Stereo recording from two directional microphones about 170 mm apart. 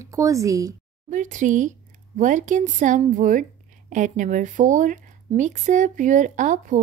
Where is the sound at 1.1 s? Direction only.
50° right (ahead or behind).